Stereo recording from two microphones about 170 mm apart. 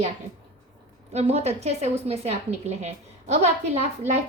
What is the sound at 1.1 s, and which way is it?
A woman's voice, 40° right (ahead or behind).